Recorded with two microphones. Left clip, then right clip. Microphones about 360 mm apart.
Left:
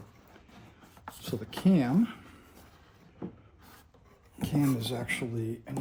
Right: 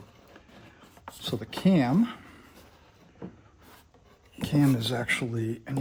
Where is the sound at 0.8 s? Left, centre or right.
Centre.